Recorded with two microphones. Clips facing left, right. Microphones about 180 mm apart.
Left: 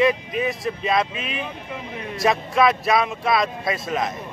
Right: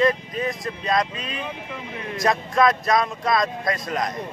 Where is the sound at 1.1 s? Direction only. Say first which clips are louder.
Left 2 dB; 20° left (ahead or behind).